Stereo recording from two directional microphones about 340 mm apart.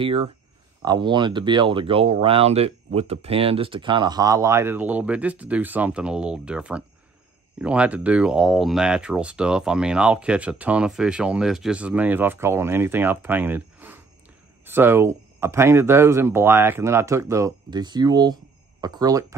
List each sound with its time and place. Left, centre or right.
0.0 s speech: centre